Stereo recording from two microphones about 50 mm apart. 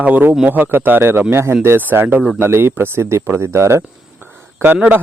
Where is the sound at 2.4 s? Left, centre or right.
Right.